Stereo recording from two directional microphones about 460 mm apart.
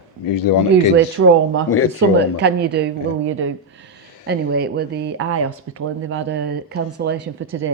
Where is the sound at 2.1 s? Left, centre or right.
Right.